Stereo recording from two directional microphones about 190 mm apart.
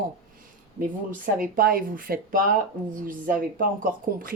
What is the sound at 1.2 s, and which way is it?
Speech, 50° right (ahead or behind).